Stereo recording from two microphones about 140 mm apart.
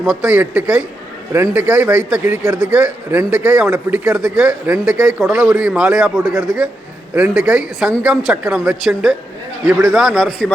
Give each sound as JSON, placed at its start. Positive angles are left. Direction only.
{"t": 0.0, "sound": "speech", "side_deg": -5}